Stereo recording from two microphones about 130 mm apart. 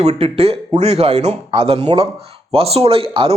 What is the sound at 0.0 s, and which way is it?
A man's voice, 50° right (ahead or behind).